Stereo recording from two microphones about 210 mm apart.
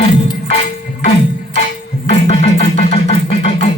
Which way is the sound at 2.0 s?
30° left (ahead or behind).